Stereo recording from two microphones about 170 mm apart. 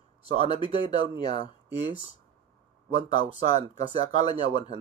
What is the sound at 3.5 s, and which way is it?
Speech, 25° left (ahead or behind).